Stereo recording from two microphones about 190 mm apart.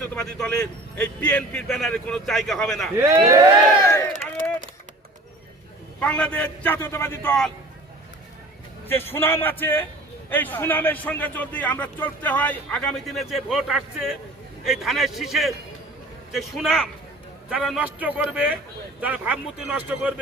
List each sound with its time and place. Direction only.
0.0 s a man's voice: 5° left (ahead or behind)
3.0 s speech: 15° right (ahead or behind)
3.8 s a sound: 15° left (ahead or behind)
6.0 s a man's voice: 5° left (ahead or behind)
8.9 s a man's voice: 10° left (ahead or behind); by 20.1 s 5° right (ahead or behind)